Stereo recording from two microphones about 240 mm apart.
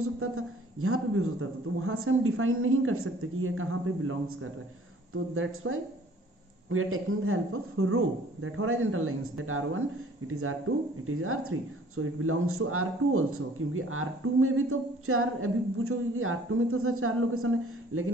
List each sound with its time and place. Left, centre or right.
0.7 s speech: right